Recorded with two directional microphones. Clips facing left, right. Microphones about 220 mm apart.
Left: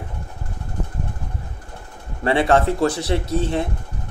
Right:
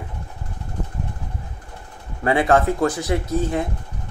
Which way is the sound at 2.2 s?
30° left (ahead or behind).